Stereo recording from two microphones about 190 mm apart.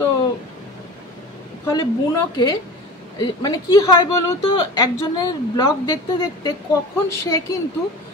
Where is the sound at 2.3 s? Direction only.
20° left (ahead or behind).